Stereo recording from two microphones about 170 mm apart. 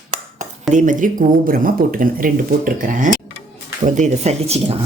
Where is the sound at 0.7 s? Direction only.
50° right (ahead or behind).